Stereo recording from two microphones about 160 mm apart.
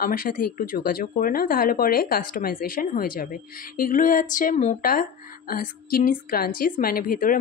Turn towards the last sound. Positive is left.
turn(degrees=60)  # may be behind; listen again after turning